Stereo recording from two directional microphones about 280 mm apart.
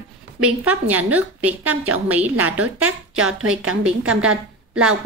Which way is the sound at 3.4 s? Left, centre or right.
Right.